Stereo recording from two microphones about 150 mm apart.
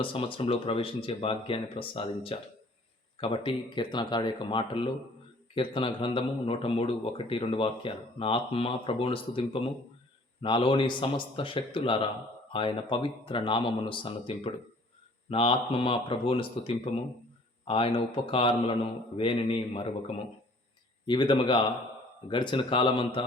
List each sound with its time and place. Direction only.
0.0 s a man's voice: 35° left (ahead or behind)
21.1 s a man's voice: 30° left (ahead or behind)